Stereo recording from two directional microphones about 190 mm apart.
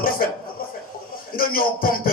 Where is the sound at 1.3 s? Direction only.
50° left (ahead or behind).